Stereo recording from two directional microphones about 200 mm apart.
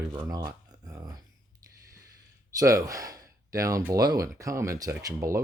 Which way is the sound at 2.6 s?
15° right (ahead or behind).